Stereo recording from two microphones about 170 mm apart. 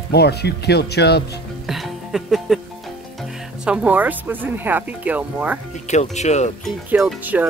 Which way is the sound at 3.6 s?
5° right (ahead or behind).